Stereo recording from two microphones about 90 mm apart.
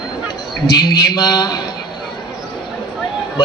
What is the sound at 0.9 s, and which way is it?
Speech, 50° left (ahead or behind).